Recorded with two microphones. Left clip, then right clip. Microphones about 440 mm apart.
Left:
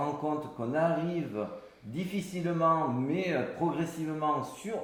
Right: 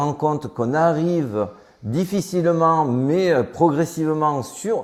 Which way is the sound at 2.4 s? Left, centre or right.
Right.